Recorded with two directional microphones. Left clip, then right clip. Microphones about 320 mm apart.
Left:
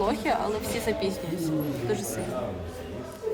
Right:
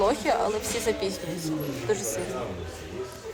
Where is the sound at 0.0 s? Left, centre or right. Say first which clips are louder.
Right 2 dB; centre.